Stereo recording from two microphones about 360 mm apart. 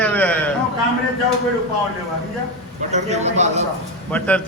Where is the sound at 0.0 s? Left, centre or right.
Centre.